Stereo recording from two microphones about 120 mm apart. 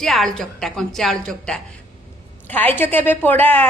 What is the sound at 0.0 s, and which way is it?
A woman's voice, 5° left (ahead or behind).